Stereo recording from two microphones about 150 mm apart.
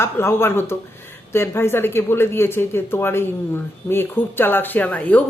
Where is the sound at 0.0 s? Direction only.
15° left (ahead or behind).